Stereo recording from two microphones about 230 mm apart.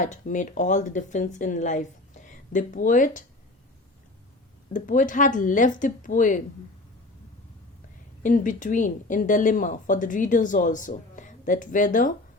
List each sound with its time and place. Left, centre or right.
0.0 s speech: left
4.7 s speech: left
8.2 s speech: left